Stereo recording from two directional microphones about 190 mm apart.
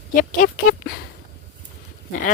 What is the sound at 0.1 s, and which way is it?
Speech, 45° left (ahead or behind).